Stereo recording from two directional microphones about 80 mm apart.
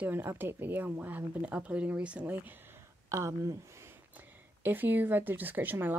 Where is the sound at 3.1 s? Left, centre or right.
Right.